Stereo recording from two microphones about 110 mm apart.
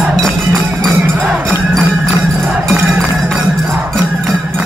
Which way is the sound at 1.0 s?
20° right (ahead or behind).